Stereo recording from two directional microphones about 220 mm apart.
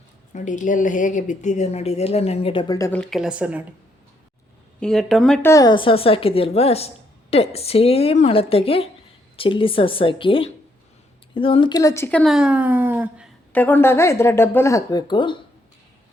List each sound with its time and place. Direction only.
0.3 s speech: 35° left (ahead or behind); by 3.6 s 5° right (ahead or behind)
4.8 s speech: centre (ahead or behind)
13.5 s speech: 5° left (ahead or behind)